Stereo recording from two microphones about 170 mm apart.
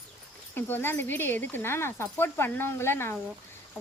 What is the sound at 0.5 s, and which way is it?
Speech, 10° left (ahead or behind).